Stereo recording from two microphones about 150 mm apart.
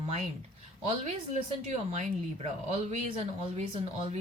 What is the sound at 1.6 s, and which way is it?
Speech, 50° right (ahead or behind).